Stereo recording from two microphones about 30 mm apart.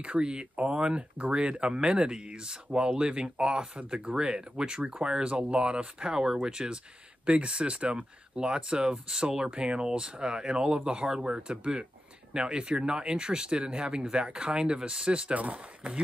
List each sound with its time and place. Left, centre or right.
0.0 s speech: right
4.0 s speech: right
4.3 s speech: right
9.8 s speech: right
15.3 s speech: right